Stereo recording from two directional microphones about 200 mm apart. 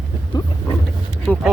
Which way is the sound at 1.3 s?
10° left (ahead or behind).